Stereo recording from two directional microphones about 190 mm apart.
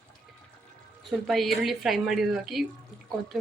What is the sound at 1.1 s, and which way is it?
Speech, centre (ahead or behind).